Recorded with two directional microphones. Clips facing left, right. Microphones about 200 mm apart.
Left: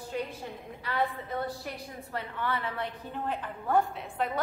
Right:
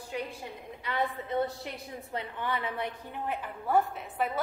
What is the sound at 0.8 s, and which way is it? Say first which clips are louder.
A woman's voice: left 1 dB; 20° right (ahead or behind).